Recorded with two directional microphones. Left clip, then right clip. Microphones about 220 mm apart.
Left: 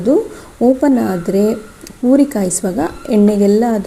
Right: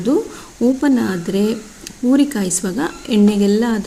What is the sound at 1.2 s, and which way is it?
A woman's voice, centre (ahead or behind).